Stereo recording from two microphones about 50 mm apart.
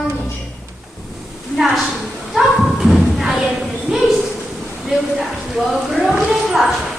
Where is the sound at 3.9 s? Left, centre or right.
Centre.